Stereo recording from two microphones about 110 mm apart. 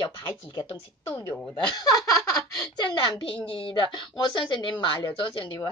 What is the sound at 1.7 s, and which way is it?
A woman's voice, 35° left (ahead or behind).